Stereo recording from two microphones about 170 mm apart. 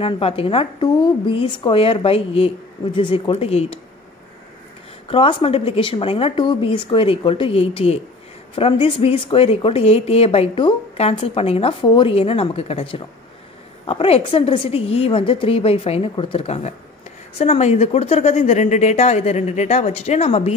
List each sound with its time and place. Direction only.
0.0 s a woman's voice: 35° left (ahead or behind)
5.0 s a woman's voice: 30° left (ahead or behind)